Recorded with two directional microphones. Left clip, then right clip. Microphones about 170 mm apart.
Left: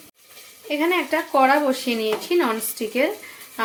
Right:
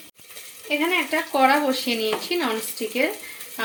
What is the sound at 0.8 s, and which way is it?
Speech, 20° left (ahead or behind).